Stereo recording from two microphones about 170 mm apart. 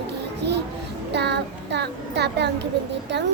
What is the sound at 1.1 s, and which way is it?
A child's voice, 80° right.